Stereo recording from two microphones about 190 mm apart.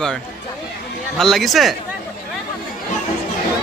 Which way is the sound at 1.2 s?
Centre (ahead or behind).